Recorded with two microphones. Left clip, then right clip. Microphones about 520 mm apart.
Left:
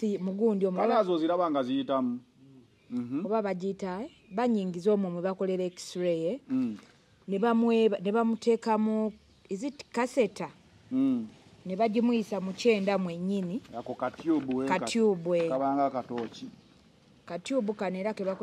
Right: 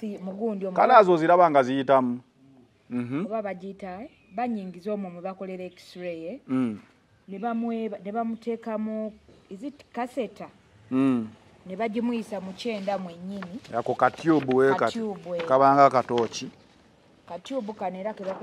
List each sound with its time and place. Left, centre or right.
0.0 s speech: left
0.7 s a man's voice: right
3.3 s a woman's voice: left
10.9 s speech: right
11.7 s speech: centre
13.7 s a man's voice: right
15.0 s speech: left
15.5 s speech: right
17.3 s speech: left